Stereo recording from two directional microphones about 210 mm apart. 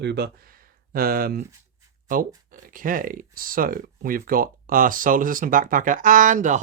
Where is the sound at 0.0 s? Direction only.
50° right (ahead or behind).